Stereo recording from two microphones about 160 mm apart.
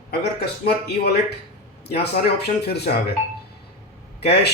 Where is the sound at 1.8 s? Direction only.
90° left.